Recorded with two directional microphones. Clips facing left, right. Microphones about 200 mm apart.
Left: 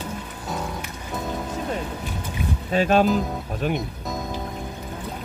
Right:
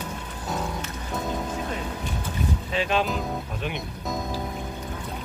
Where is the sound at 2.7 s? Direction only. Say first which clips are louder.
Left 8 dB; 45° left (ahead or behind).